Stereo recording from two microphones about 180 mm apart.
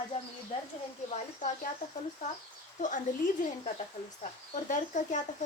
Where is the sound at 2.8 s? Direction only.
45° left (ahead or behind).